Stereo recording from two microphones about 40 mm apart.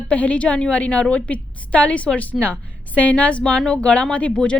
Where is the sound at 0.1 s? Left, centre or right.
Left.